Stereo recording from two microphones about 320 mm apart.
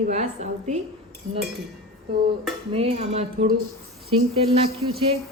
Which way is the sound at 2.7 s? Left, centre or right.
Centre.